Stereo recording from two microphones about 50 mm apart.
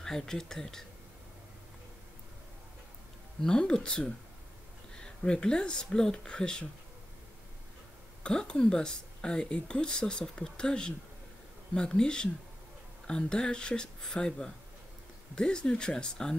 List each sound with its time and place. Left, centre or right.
0.0 s speech: centre
3.4 s speech: centre
8.2 s speech: centre